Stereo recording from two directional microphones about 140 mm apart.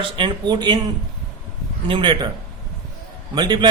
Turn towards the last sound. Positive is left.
turn(degrees=-30)  # may be behind; listen again after turning